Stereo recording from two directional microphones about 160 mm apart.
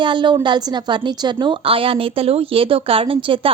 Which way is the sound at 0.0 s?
30° right (ahead or behind).